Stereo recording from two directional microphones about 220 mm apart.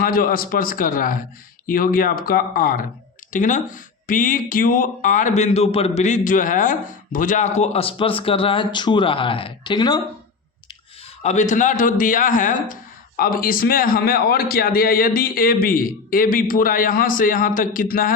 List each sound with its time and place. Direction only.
0.0 s speech: 40° left (ahead or behind); by 10.0 s 20° left (ahead or behind)
11.2 s speech: 30° left (ahead or behind)